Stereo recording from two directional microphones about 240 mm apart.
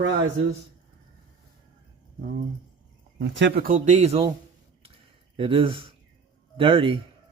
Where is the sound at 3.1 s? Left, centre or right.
Right.